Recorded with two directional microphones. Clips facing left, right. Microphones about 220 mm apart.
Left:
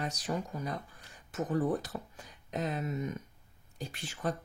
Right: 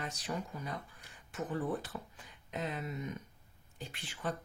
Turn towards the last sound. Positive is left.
turn(degrees=40)  # may be behind; listen again after turning